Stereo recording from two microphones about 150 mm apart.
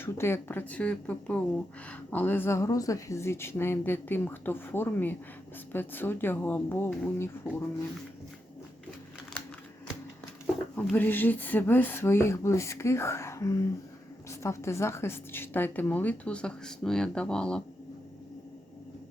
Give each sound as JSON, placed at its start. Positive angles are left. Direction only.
{"t": 0.0, "sound": "a woman's voice", "side_deg": 15}
{"t": 10.4, "sound": "a woman's voice", "side_deg": 10}